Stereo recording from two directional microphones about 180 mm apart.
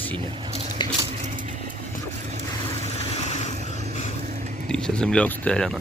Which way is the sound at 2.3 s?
40° right (ahead or behind).